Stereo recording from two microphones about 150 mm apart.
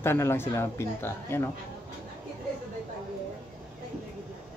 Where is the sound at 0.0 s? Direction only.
15° left (ahead or behind).